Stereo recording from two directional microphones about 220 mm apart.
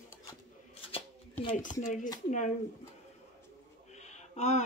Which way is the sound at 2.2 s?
35° left (ahead or behind).